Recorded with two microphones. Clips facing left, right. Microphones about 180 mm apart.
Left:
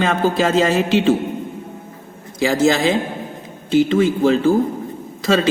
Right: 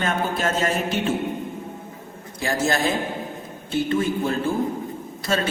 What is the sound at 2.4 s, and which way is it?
A man's voice, 90° left.